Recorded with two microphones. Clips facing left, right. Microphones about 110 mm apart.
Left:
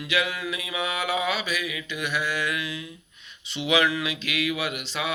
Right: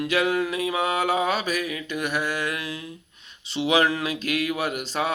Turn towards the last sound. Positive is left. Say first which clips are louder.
# right 4 dB
turn(degrees=-40)  # may be behind; listen again after turning